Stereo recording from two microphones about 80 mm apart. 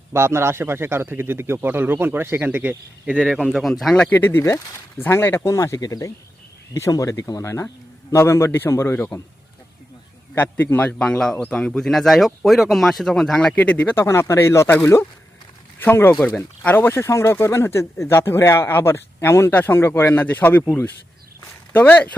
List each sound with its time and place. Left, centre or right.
0.1 s a man's voice: right
3.4 s speech: centre
4.1 s speech: left
5.5 s a man's voice: left
10.3 s a man's voice: left
14.0 s a man's voice: left
16.9 s a man's voice: left
21.4 s a sound: left